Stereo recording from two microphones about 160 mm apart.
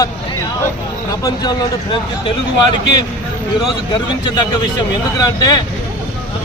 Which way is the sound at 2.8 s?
25° left (ahead or behind).